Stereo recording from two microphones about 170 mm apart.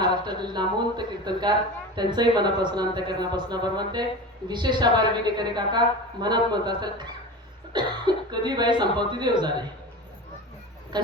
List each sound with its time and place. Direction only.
0.0 s a woman's voice: 25° right (ahead or behind)
10.9 s music: 25° right (ahead or behind)